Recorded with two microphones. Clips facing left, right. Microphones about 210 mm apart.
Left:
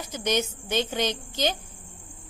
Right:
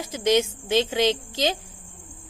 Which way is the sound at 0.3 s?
90° right.